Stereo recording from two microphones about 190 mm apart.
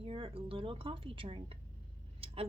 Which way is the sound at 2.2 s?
30° right (ahead or behind).